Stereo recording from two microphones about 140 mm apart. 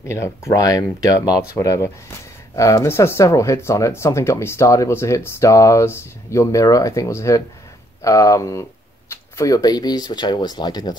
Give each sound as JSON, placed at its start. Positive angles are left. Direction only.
{"t": 0.0, "sound": "speech", "side_deg": 20}